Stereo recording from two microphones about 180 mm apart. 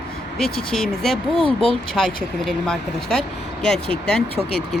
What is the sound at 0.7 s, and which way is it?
Speech, centre (ahead or behind).